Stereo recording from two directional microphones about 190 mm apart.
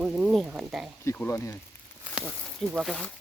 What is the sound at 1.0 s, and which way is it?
Speech, 10° left (ahead or behind).